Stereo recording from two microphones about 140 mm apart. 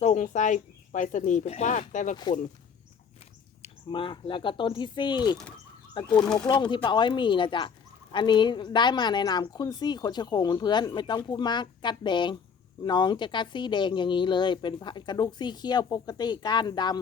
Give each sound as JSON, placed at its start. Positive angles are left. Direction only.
{"t": 0.0, "sound": "speech", "side_deg": 55}
{"t": 3.6, "sound": "speech", "side_deg": 35}
{"t": 6.2, "sound": "speech", "side_deg": 5}
{"t": 6.5, "sound": "speech", "side_deg": 35}